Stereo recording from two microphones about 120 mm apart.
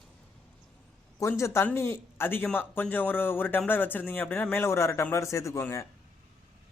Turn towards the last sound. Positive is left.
turn(degrees=25)  # may be behind; listen again after turning